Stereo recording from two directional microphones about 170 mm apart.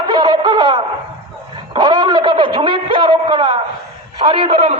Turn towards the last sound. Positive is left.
turn(degrees=-35)  # may be behind; listen again after turning